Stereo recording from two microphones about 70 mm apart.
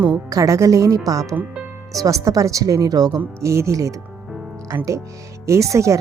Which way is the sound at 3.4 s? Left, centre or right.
Right.